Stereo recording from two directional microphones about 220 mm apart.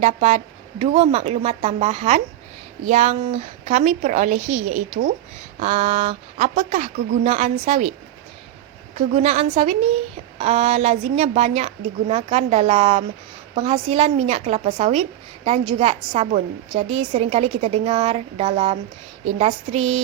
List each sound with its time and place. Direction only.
0.0 s a woman's voice: 30° right (ahead or behind)
9.0 s a woman's voice: 30° right (ahead or behind)